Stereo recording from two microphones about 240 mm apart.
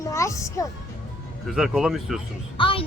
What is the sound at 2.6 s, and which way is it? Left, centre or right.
Speech, left.